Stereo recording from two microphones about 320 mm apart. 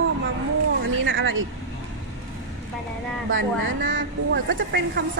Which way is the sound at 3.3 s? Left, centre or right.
Right.